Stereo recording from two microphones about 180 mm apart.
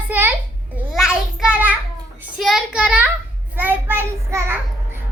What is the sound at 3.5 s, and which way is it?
Child singing, 10° right (ahead or behind).